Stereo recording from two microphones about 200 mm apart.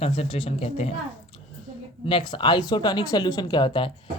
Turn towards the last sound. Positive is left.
turn(degrees=25)  # may be behind; listen again after turning